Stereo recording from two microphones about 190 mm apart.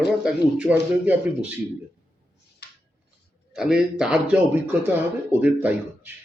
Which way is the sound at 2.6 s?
60° left (ahead or behind).